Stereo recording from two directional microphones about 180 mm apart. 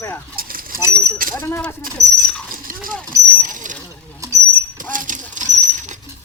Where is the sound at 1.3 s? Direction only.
10° left (ahead or behind).